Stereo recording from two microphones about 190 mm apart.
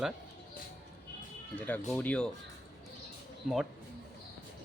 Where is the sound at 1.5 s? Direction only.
10° left (ahead or behind).